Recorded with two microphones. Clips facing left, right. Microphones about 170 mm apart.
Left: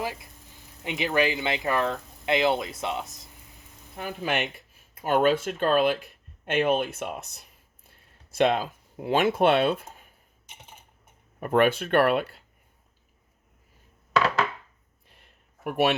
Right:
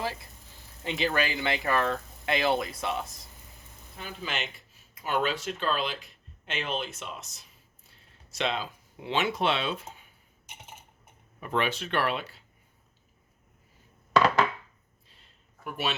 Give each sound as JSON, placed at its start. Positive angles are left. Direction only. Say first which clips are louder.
{"t": 0.0, "sound": "speech", "louder": "left 1 dB", "side_deg": 15}
{"t": 3.9, "sound": "speech", "louder": "left 7 dB", "side_deg": 55}
{"t": 11.3, "sound": "speech", "louder": "left 8 dB", "side_deg": 50}
{"t": 15.0, "sound": "a sound", "louder": "left 4 dB", "side_deg": 60}